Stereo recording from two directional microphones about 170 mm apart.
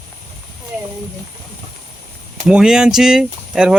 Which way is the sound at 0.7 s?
10° right (ahead or behind).